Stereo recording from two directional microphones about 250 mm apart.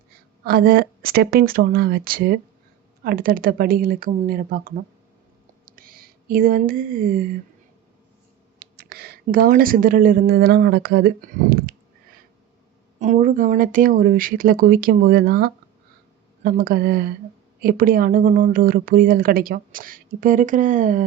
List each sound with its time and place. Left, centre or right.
0.4 s speech: right
5.6 s a sound: right
8.5 s speech: right
13.0 s speech: right